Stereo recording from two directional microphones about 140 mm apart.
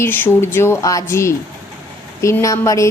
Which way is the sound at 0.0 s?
15° left (ahead or behind).